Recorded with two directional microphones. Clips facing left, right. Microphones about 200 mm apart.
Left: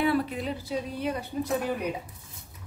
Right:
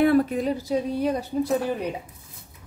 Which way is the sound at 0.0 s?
45° right (ahead or behind).